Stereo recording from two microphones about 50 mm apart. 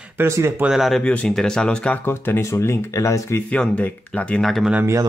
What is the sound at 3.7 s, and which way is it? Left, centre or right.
Speech, left.